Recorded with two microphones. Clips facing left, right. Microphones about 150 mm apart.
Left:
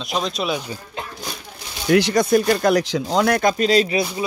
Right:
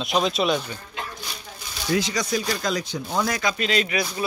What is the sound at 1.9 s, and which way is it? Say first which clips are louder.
Speech: left 9 dB; 60° left (ahead or behind).